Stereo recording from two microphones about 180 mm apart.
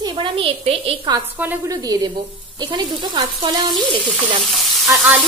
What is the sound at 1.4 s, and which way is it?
Speech, 15° right (ahead or behind).